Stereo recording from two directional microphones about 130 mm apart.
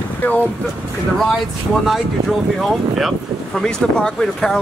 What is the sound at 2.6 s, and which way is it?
Speech, centre (ahead or behind).